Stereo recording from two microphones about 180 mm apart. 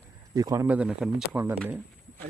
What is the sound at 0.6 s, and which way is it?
Speech, 5° right (ahead or behind).